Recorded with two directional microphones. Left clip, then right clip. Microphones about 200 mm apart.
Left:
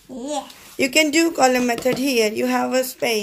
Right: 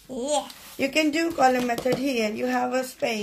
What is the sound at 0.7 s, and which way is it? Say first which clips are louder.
Speech: left 6 dB; 50° left (ahead or behind).